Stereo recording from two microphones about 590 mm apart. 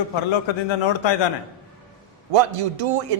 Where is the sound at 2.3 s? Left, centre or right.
Right.